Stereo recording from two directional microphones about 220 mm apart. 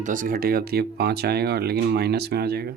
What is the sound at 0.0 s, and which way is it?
Speech, 40° right (ahead or behind).